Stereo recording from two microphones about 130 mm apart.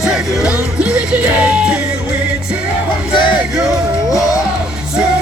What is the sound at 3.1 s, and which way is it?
Music, 40° left (ahead or behind).